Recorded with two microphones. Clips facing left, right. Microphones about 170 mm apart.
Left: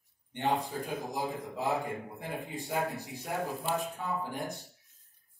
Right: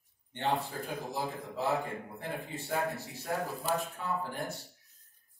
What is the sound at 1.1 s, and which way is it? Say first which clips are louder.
Speech: left 1 dB; 15° left (ahead or behind).